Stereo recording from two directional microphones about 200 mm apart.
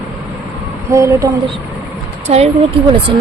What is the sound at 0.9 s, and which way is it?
Speech, 15° right (ahead or behind).